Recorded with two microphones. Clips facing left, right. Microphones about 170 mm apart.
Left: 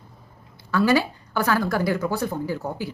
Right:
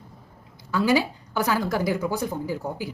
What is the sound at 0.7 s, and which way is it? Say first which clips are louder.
A woman's voice: left 2 dB; 15° right (ahead or behind).